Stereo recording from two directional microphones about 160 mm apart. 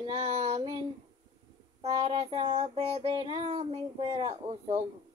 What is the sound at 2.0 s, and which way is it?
Child singing, 35° right (ahead or behind).